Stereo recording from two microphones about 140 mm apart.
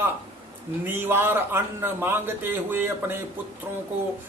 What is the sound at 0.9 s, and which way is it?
A man's voice, 15° right (ahead or behind).